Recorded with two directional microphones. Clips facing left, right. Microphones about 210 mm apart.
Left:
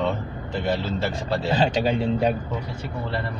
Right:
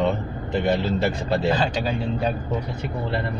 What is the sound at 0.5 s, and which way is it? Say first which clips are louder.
Speech: right 4 dB; 20° right (ahead or behind).